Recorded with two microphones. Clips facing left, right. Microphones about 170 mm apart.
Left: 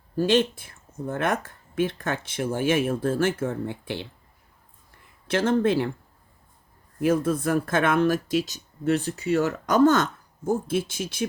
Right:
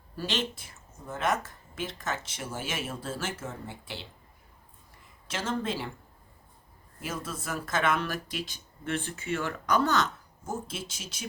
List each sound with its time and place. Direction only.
0.2 s speech: 50° left (ahead or behind)
5.3 s speech: 60° left (ahead or behind)
7.0 s speech: 55° left (ahead or behind)